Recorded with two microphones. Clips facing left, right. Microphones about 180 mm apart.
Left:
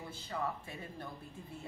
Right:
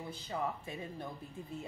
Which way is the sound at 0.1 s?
20° right (ahead or behind).